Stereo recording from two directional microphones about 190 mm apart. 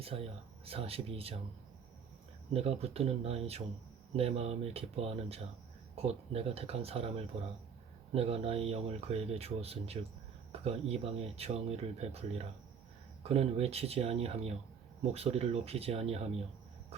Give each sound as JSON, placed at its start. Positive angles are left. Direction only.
{"t": 0.0, "sound": "speech", "side_deg": -30}
{"t": 2.5, "sound": "speech", "side_deg": -30}